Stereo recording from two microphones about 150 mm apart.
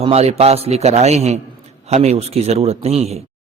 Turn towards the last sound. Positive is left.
turn(degrees=-45)  # may be behind; listen again after turning